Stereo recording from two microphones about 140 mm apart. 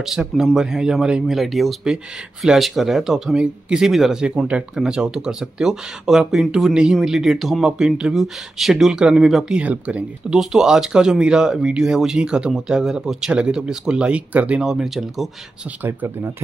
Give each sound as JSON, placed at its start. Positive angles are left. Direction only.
{"t": 0.0, "sound": "speech", "side_deg": 0}
{"t": 15.8, "sound": "speech", "side_deg": -15}